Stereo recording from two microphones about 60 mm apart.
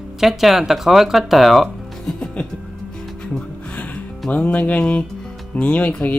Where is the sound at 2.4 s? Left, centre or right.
Centre.